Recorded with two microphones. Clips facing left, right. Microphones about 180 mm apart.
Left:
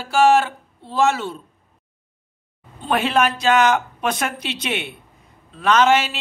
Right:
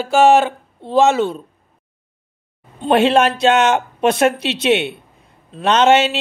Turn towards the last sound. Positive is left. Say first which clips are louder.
# right 3 dB
turn(degrees=-25)  # may be behind; listen again after turning